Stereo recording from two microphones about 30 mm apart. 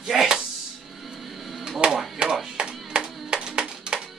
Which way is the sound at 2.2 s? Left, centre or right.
Right.